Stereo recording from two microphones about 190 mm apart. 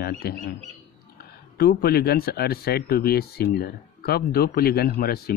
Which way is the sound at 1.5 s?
55° left (ahead or behind).